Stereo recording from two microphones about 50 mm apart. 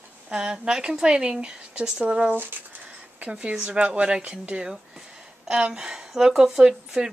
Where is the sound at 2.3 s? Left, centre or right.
Right.